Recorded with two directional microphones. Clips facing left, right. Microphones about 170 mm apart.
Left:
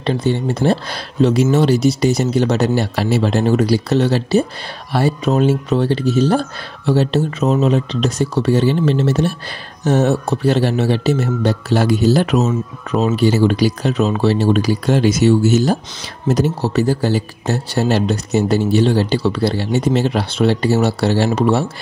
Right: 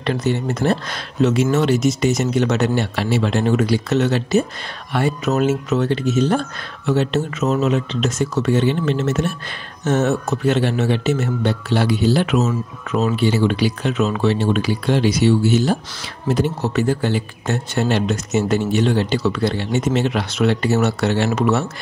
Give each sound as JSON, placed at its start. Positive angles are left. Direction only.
{"t": 0.0, "sound": "speech", "side_deg": 30}